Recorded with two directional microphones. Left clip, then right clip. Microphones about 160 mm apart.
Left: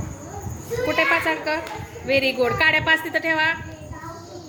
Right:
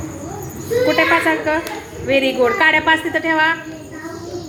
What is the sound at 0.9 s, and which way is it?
A woman's voice, 20° left (ahead or behind).